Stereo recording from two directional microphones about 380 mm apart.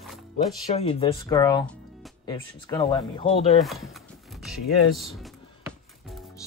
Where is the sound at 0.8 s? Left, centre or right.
Centre.